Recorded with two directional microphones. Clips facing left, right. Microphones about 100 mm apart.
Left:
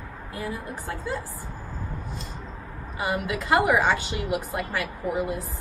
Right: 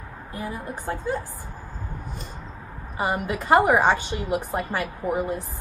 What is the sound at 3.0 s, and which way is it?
A woman's voice, 40° right (ahead or behind).